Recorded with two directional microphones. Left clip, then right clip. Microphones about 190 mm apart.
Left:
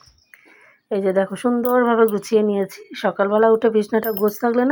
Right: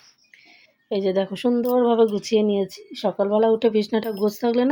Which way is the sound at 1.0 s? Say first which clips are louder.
Left 4 dB; 10° right (ahead or behind).